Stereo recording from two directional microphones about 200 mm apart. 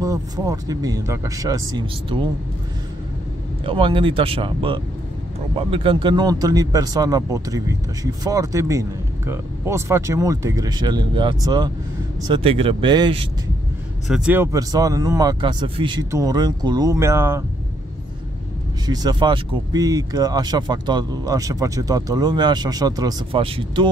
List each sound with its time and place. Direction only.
0.0 s speech: 15° right (ahead or behind)
3.6 s speech: 25° right (ahead or behind)
14.0 s speech: 5° right (ahead or behind)
18.9 s speech: 20° right (ahead or behind)